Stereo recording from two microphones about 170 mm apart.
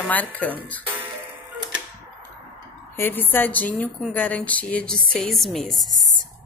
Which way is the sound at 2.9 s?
10° left (ahead or behind).